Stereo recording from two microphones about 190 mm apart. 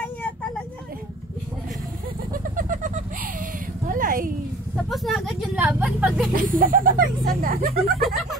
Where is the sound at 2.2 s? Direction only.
45° right (ahead or behind).